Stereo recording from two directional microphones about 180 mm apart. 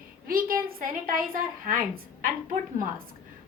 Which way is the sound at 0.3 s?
55° right (ahead or behind).